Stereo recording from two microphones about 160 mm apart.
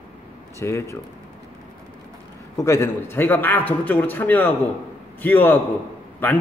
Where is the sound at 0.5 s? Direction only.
15° left (ahead or behind).